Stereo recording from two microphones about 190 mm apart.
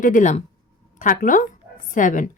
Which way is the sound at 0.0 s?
40° left (ahead or behind).